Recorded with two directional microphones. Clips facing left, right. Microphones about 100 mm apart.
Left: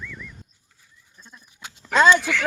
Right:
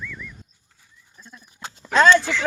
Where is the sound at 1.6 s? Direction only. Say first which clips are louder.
Right 5 dB; 35° right (ahead or behind).